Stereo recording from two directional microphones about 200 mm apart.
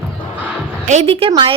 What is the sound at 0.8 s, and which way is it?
Speech, 30° right (ahead or behind).